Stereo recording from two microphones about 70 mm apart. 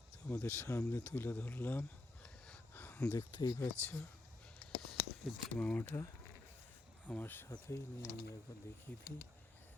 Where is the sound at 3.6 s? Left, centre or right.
Left.